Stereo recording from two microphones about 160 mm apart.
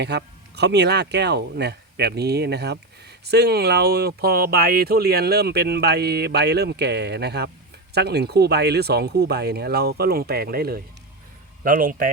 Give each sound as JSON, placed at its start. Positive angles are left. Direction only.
{"t": 0.0, "sound": "speech", "side_deg": -90}
{"t": 11.6, "sound": "a man's voice", "side_deg": -60}